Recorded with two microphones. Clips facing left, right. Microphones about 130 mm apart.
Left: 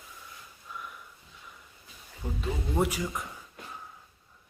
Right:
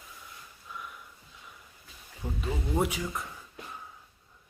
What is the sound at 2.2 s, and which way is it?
Speech, 10° right (ahead or behind).